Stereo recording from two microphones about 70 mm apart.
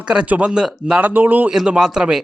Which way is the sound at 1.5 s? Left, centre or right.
Centre.